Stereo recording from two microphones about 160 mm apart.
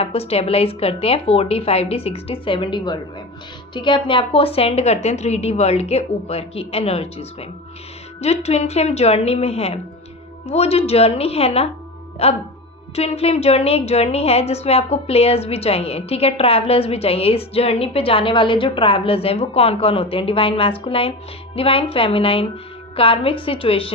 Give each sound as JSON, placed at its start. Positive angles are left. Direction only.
{"t": 0.0, "sound": "a woman's voice", "side_deg": 40}